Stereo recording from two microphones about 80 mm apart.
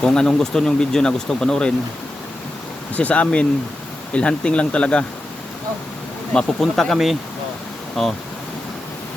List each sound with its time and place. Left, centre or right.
0.0 s speech: centre
2.9 s speech: centre
6.3 s speech: centre